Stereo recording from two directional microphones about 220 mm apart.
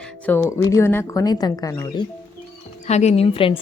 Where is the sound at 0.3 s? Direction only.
10° left (ahead or behind).